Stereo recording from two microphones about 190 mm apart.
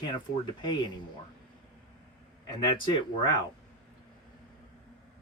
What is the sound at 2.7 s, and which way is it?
Speech, 25° left (ahead or behind).